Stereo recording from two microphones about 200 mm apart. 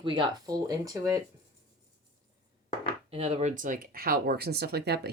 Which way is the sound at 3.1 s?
30° right (ahead or behind).